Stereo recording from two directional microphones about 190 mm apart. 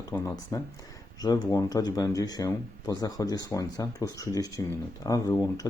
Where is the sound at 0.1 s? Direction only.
15° left (ahead or behind).